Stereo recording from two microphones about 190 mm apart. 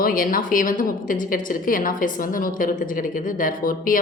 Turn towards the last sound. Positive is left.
turn(degrees=45)  # may be behind; listen again after turning